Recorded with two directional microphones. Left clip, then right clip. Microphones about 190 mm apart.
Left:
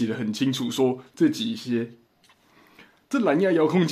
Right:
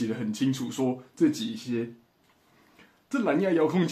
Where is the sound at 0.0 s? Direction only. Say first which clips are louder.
Left 3 dB; 40° left (ahead or behind).